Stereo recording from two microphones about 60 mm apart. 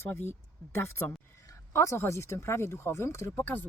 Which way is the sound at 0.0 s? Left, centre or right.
Left.